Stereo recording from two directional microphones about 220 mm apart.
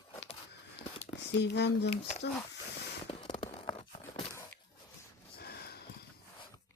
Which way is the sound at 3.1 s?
25° left (ahead or behind).